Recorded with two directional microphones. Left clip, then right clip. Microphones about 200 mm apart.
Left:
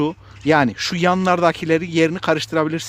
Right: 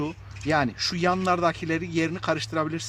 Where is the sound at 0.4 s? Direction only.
50° left (ahead or behind).